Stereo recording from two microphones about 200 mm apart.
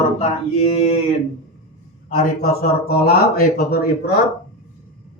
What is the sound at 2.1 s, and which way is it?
Speech, 50° left (ahead or behind).